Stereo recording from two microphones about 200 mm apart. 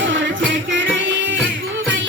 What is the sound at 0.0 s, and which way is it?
Music, 65° right (ahead or behind).